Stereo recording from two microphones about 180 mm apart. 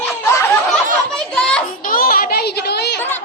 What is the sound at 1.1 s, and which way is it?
Children playing, 5° left (ahead or behind).